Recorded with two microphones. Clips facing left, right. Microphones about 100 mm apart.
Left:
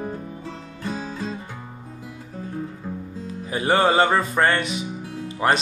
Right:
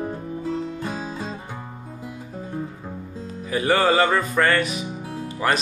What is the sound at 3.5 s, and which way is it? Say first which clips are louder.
Music: even; 25° left (ahead or behind).